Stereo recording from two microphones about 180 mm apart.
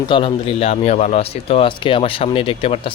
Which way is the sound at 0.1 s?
30° left (ahead or behind).